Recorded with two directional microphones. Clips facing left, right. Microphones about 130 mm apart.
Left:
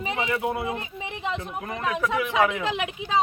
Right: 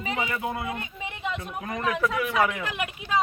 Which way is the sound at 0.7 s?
25° left (ahead or behind).